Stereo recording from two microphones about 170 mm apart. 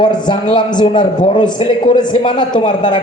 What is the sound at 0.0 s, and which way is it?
A man's voice, 25° left (ahead or behind).